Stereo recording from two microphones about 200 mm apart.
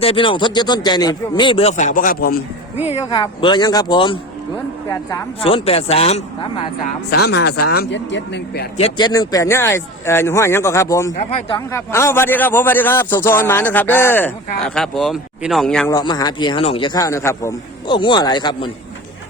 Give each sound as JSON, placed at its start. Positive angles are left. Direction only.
{"t": 0.0, "sound": "a man's voice", "side_deg": 25}
{"t": 2.8, "sound": "a man's voice", "side_deg": 30}
{"t": 5.4, "sound": "a man's voice", "side_deg": 30}
{"t": 7.1, "sound": "speech", "side_deg": 55}
{"t": 8.8, "sound": "a man's voice", "side_deg": 20}
{"t": 11.1, "sound": "speech", "side_deg": 35}
{"t": 11.5, "sound": "a man's voice", "side_deg": 15}
{"t": 15.9, "sound": "a man's voice", "side_deg": 20}